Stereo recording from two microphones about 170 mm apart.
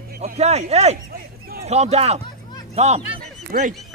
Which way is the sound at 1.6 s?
40° right (ahead or behind).